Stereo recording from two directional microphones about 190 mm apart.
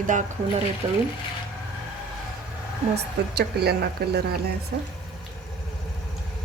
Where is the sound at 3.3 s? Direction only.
60° right (ahead or behind).